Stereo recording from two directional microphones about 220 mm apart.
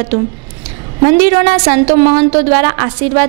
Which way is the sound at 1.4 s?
20° right (ahead or behind).